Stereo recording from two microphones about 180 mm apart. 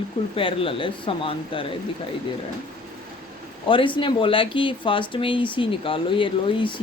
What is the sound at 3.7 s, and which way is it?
Speech, 25° left (ahead or behind).